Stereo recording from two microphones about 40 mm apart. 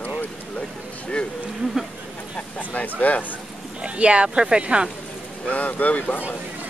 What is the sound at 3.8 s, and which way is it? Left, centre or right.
Speech, right.